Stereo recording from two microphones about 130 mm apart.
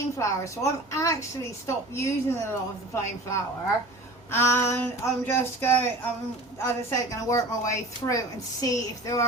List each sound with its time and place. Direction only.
0.2 s a woman's voice: 25° left (ahead or behind)